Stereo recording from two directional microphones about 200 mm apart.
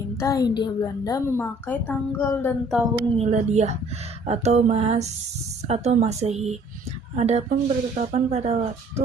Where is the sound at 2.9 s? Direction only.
35° right (ahead or behind).